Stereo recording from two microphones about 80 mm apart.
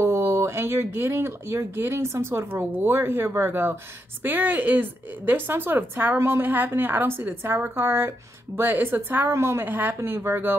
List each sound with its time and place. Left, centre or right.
0.0 s a woman's voice: right